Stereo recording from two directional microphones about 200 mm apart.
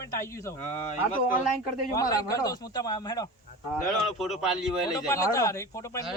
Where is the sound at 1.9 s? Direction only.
20° left (ahead or behind).